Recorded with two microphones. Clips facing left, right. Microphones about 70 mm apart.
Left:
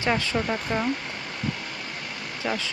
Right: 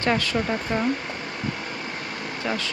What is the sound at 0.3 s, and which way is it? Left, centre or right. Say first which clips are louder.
Speech: right 1 dB; centre.